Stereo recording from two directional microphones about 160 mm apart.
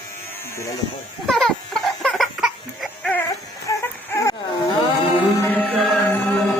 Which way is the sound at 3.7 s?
20° left (ahead or behind).